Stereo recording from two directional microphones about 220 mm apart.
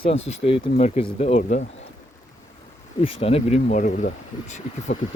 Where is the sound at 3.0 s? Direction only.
25° left (ahead or behind).